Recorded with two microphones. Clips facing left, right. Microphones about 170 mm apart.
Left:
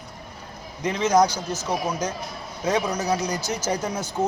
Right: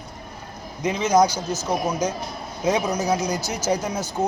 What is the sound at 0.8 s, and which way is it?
Speech, 10° right (ahead or behind).